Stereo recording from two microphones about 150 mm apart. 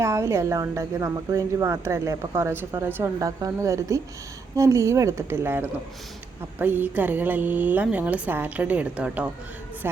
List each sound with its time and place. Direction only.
0.0 s a woman's voice: 20° right (ahead or behind)